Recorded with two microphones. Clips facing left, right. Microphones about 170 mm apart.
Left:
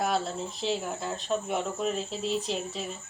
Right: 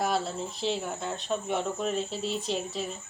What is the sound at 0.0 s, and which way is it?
Speech, centre (ahead or behind).